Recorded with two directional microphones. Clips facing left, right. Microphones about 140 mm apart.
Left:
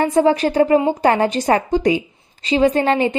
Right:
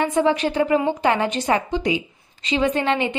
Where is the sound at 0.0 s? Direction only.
40° left (ahead or behind).